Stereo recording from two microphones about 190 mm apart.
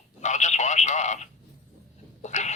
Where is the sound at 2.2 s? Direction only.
40° left (ahead or behind).